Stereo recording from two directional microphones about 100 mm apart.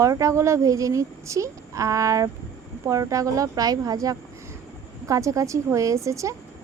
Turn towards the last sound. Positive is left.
turn(degrees=-30)  # may be behind; listen again after turning